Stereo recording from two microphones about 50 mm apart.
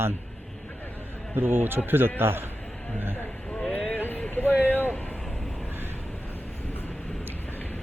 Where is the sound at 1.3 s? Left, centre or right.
Right.